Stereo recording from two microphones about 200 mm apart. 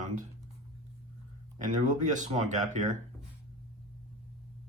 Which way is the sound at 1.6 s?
40° right (ahead or behind).